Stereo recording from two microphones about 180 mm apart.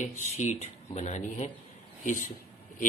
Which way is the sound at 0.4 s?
40° left (ahead or behind).